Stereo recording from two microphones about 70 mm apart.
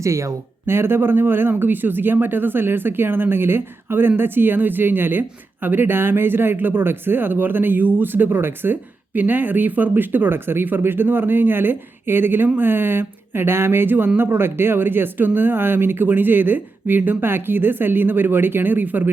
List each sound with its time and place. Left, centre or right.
0.0 s speech: right